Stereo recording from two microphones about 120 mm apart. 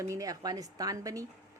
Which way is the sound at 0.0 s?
30° right (ahead or behind).